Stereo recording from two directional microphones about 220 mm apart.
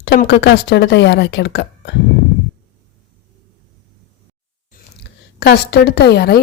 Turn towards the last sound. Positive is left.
turn(degrees=45)  # may be behind; listen again after turning